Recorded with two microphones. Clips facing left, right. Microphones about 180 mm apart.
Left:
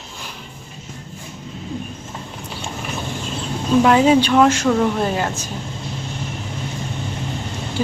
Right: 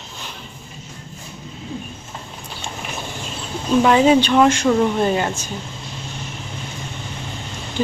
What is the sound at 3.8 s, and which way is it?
Speech, centre (ahead or behind).